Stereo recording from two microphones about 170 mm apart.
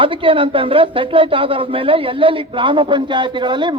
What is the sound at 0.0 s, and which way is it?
A man's voice, 30° right (ahead or behind).